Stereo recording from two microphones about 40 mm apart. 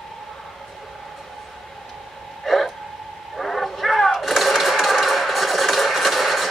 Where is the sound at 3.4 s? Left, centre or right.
Centre.